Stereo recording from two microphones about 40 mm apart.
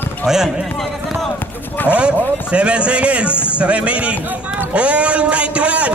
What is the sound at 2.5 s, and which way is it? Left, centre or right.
A man's voice, right.